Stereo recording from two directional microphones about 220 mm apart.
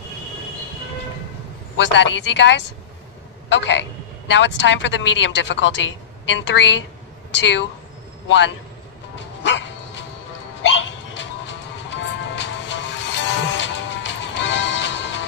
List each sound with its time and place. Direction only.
1.8 s a woman's voice: 55° left (ahead or behind)
9.4 s dog: 55° left (ahead or behind)
10.6 s music: 55° left (ahead or behind)